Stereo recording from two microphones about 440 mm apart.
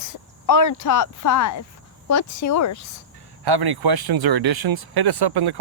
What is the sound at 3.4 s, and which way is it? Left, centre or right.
Speech, right.